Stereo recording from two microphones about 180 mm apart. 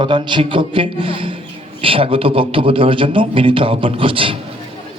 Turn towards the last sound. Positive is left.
turn(degrees=-30)  # may be behind; listen again after turning